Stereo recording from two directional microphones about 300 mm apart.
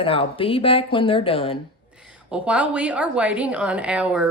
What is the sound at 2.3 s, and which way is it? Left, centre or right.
A woman's voice, centre.